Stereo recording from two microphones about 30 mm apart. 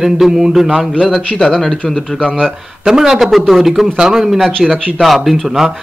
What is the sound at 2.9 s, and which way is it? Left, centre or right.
Speech, centre.